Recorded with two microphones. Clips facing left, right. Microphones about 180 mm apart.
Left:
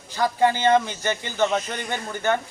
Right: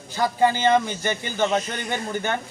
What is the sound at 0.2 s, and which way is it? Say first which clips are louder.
A man's voice: even; 15° right (ahead or behind).